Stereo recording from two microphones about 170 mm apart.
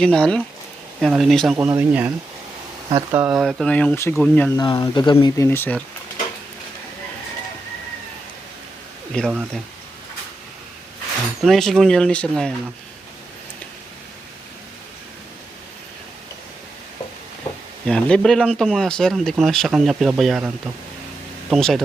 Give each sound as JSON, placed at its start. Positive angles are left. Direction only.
{"t": 0.0, "sound": "a man's voice", "side_deg": 5}
{"t": 1.5, "sound": "a man's voice", "side_deg": -10}
{"t": 4.5, "sound": "a man's voice", "side_deg": 25}
{"t": 9.1, "sound": "a man's voice", "side_deg": 0}
{"t": 11.3, "sound": "a man's voice", "side_deg": 0}
{"t": 17.8, "sound": "a man's voice", "side_deg": 5}
{"t": 21.5, "sound": "a man's voice", "side_deg": 0}